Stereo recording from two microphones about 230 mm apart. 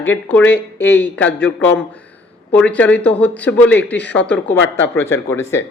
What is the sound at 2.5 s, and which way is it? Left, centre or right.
Speech, centre.